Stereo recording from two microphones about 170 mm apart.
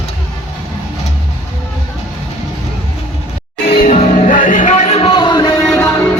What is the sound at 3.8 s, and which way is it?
Music, 45° left (ahead or behind).